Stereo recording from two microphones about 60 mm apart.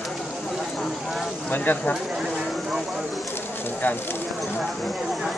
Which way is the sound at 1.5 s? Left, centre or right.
Left.